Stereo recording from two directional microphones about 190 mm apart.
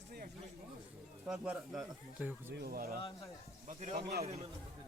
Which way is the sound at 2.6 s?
55° right (ahead or behind).